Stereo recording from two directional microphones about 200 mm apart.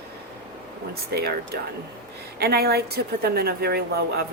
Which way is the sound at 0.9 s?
50° right (ahead or behind).